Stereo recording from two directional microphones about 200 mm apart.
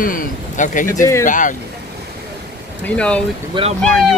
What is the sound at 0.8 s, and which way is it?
Speech, 15° left (ahead or behind).